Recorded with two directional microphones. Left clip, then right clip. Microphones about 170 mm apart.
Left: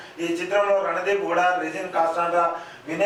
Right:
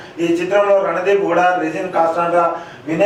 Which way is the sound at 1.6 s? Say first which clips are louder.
Right 7 dB; 10° right (ahead or behind).